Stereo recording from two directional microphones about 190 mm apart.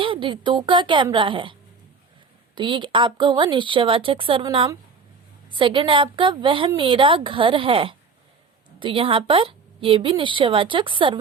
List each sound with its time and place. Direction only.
0.0 s a woman's voice: 25° right (ahead or behind)
2.6 s a woman's voice: 25° right (ahead or behind)